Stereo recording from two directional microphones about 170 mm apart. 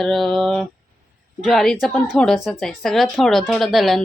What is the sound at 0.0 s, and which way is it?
A woman's voice, centre (ahead or behind).